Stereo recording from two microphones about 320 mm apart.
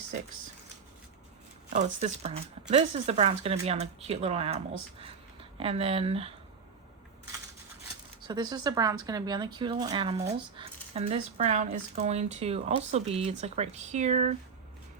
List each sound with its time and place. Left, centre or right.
1.7 s speech: right
8.2 s speech: centre